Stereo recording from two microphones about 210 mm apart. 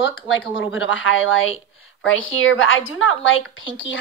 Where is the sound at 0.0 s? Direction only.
65° left (ahead or behind).